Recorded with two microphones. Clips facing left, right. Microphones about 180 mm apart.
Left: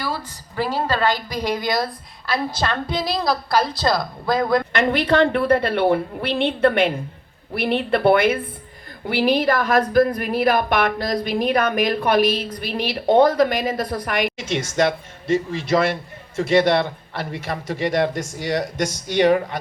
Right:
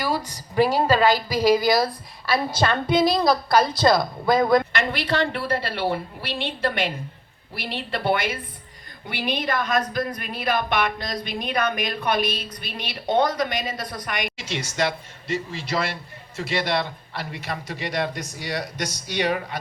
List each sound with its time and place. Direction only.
0.0 s a woman's voice: 15° right (ahead or behind)
4.7 s speech: 50° left (ahead or behind)
17.2 s speech: 50° left (ahead or behind)